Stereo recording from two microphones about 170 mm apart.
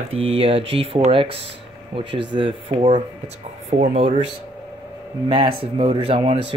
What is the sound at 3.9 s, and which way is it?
Speech, 35° right (ahead or behind).